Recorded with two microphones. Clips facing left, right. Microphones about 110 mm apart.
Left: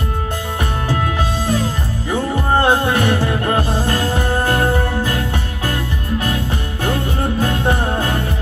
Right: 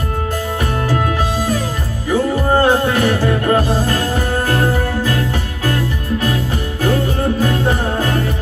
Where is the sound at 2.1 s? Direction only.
20° left (ahead or behind).